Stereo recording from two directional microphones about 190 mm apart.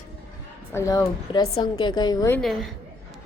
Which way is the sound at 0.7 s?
15° left (ahead or behind).